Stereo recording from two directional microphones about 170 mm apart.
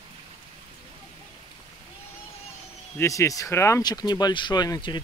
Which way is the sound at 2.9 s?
15° left (ahead or behind).